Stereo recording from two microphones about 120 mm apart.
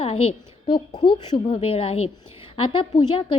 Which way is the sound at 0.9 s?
40° left (ahead or behind).